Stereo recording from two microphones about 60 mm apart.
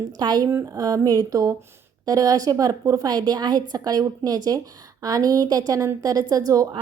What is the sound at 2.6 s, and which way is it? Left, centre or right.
A woman's voice, right.